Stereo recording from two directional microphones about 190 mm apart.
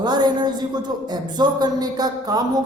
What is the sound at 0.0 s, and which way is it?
A man's voice, 20° right (ahead or behind).